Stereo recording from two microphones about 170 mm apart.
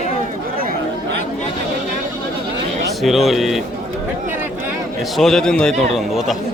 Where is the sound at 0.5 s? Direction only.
60° right (ahead or behind).